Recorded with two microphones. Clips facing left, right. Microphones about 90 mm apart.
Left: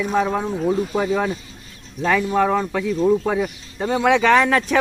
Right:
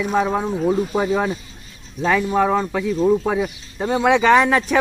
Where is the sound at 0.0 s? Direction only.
5° right (ahead or behind).